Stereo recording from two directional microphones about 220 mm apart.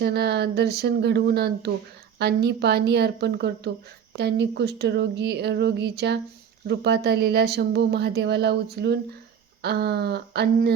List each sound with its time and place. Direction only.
0.0 s speech: 50° right (ahead or behind)